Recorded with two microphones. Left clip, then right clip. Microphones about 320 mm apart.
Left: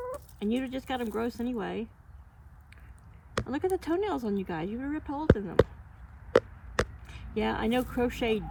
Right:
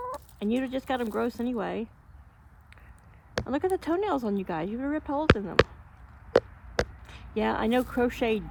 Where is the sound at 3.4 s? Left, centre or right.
Right.